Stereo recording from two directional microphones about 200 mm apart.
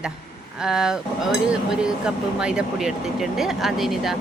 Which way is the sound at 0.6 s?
5° right (ahead or behind).